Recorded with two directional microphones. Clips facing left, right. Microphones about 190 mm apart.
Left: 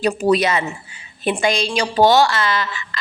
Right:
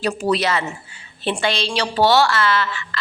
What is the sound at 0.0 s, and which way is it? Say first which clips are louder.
A woman's voice: left 4 dB; 15° left (ahead or behind).